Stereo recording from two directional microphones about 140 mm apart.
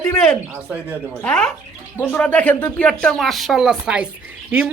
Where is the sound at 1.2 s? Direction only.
10° left (ahead or behind); by 4.1 s 5° right (ahead or behind).